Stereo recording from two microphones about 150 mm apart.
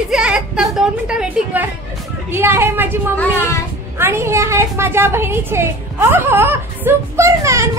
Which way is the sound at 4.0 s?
15° right (ahead or behind).